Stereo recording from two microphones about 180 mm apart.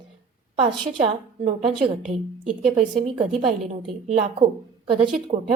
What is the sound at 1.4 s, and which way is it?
Speech, 40° right (ahead or behind).